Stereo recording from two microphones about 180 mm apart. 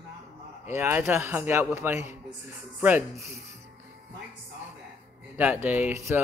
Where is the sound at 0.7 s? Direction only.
15° right (ahead or behind).